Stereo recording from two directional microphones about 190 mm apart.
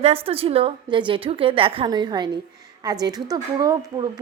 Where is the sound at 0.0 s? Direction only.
30° right (ahead or behind).